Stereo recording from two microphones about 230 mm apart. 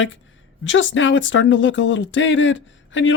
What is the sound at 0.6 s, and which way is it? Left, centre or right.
Speech, left.